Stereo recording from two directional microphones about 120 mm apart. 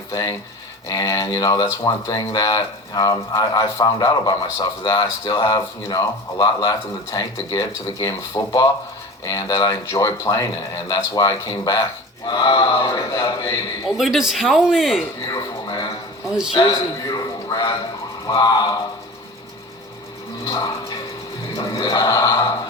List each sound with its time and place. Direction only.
0.1 s speech: 30° left (ahead or behind)
13.9 s speech: 5° right (ahead or behind)
15.3 s a sound: 30° left (ahead or behind)
18.3 s speech: 35° left (ahead or behind)
20.4 s music: 30° left (ahead or behind)
21.5 s a sound: 30° left (ahead or behind)